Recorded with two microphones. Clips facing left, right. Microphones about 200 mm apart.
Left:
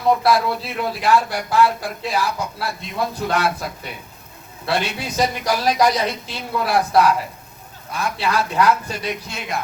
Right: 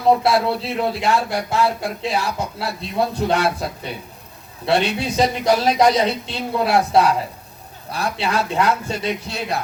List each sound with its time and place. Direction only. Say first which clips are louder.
0.1 s speech: right 1 dB; 25° right (ahead or behind)